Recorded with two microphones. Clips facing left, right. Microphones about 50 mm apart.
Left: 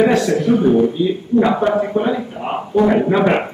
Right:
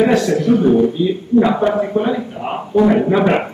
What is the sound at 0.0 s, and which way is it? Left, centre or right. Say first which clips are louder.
A man's voice: even; centre.